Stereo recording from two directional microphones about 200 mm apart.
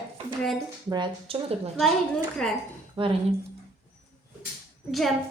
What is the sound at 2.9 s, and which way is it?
Speech, 25° right (ahead or behind).